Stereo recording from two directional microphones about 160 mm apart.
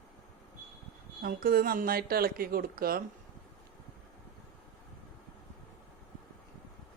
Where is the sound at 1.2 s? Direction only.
65° right (ahead or behind).